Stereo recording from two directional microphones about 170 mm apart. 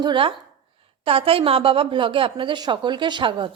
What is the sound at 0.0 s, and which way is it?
A woman's voice, 30° right (ahead or behind).